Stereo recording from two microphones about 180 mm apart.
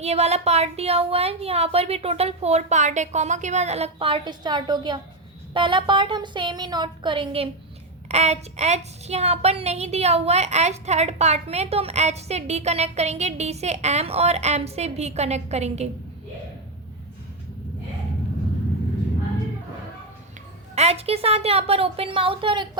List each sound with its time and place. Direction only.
0.0 s a woman's voice: 35° right (ahead or behind)
20.7 s a woman's voice: 35° right (ahead or behind)